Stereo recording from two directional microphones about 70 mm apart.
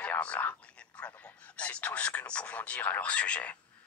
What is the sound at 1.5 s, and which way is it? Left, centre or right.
Speech, centre.